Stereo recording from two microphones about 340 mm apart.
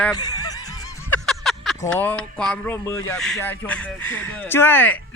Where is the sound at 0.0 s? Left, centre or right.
Centre.